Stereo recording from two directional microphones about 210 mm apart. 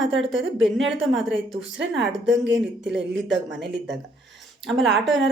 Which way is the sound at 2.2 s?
55° right (ahead or behind).